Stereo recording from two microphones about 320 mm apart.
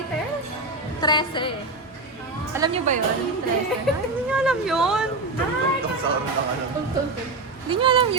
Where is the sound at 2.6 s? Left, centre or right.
Right.